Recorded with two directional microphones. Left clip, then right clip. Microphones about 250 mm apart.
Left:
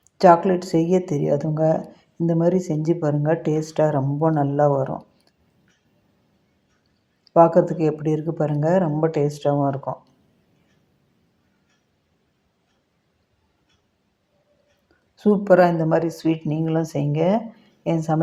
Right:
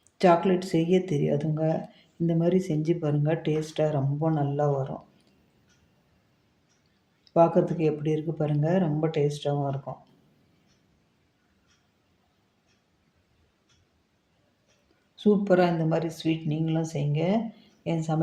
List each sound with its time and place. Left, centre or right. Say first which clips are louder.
0.2 s speech: left 7 dB; centre
7.3 s speech: left 7 dB; centre
15.1 s a woman's voice: left 7 dB; centre